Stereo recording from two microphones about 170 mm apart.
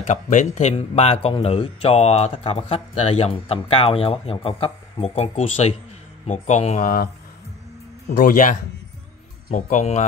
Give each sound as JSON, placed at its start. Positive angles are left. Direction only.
{"t": 0.0, "sound": "speech", "side_deg": 45}
{"t": 0.7, "sound": "speech", "side_deg": 35}
{"t": 8.2, "sound": "speech", "side_deg": 55}